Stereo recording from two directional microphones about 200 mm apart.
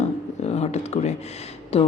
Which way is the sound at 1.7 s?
30° left (ahead or behind).